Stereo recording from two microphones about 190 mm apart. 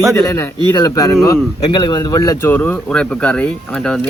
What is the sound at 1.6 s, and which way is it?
Speech, 25° left (ahead or behind).